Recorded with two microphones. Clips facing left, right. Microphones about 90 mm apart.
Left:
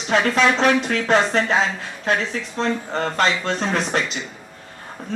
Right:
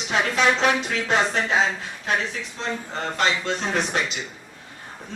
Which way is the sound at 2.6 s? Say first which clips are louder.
Left 7 dB; 50° left (ahead or behind).